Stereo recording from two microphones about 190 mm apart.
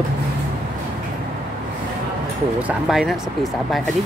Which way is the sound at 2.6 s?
5° right (ahead or behind).